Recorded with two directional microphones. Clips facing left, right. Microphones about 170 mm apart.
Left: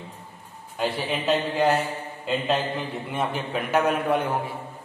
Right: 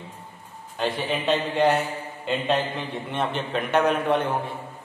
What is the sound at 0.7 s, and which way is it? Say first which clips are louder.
A man's voice: right 1 dB; 5° left (ahead or behind).